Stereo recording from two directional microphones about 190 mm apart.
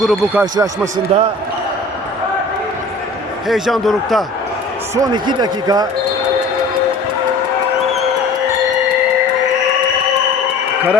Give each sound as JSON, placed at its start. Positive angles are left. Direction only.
{"t": 0.0, "sound": "speech", "side_deg": 0}
{"t": 1.1, "sound": "speech", "side_deg": -35}
{"t": 3.5, "sound": "speech", "side_deg": 0}
{"t": 4.9, "sound": "speech", "side_deg": -20}